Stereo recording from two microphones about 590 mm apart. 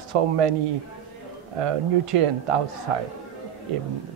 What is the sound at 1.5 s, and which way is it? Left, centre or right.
Speech, right.